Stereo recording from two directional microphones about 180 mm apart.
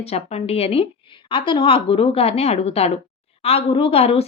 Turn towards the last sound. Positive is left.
turn(degrees=35)  # may be behind; listen again after turning